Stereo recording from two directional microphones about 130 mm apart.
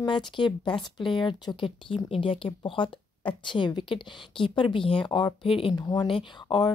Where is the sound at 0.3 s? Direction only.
40° left (ahead or behind).